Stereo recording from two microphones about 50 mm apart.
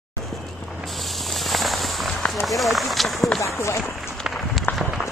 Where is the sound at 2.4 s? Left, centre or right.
Centre.